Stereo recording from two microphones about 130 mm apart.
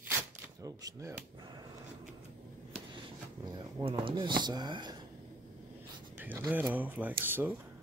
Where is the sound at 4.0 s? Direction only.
40° right (ahead or behind).